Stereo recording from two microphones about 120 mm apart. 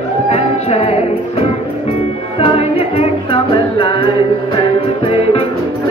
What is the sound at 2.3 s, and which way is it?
Music, 55° left (ahead or behind).